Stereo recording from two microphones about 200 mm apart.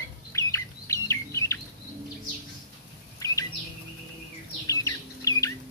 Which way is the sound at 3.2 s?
15° left (ahead or behind).